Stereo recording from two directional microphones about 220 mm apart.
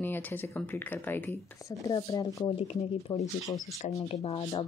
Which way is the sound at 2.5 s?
25° left (ahead or behind).